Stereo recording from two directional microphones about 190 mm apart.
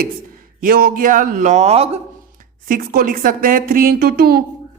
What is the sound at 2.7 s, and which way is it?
Speech, 45° right (ahead or behind).